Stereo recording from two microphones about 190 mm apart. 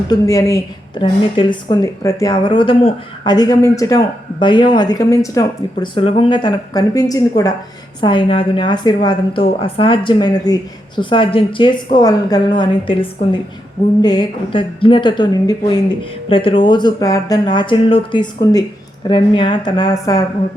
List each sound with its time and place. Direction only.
0.1 s speech: 15° left (ahead or behind)